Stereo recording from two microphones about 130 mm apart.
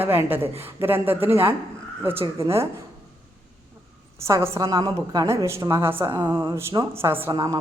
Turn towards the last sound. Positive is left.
turn(degrees=-30)  # may be behind; listen again after turning